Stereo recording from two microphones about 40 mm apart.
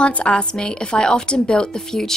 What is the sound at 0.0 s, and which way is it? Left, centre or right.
A woman's voice, left.